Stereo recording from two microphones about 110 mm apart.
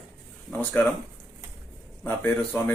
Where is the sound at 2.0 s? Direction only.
20° left (ahead or behind).